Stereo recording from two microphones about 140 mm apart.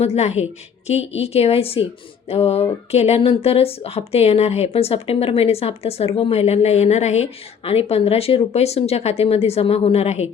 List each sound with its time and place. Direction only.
0.0 s speech: 50° left (ahead or behind)